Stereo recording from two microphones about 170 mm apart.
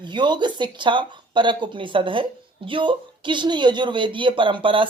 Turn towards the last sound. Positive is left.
turn(degrees=-30)  # may be behind; listen again after turning